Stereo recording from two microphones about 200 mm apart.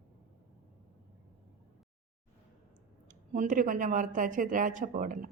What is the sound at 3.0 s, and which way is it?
Speech, 40° right (ahead or behind).